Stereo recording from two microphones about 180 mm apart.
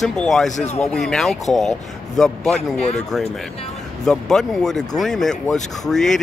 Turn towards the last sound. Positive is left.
turn(degrees=0)  # may be behind; listen again after turning